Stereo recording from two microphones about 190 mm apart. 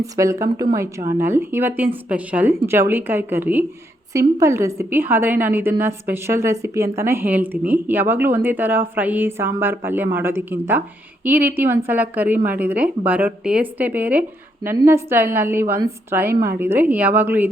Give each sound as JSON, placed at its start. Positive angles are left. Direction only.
{"t": 0.0, "sound": "a woman's voice", "side_deg": -15}